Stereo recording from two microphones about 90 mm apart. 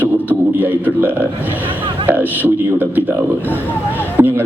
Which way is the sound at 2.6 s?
20° right (ahead or behind).